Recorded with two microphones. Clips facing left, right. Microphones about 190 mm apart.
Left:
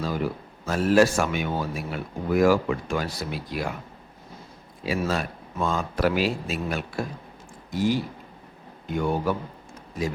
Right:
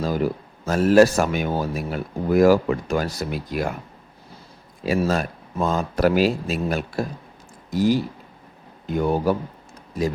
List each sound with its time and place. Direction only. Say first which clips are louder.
0.0 s speech: right 5 dB; 40° right (ahead or behind)
4.9 s speech: right 5 dB; 45° right (ahead or behind)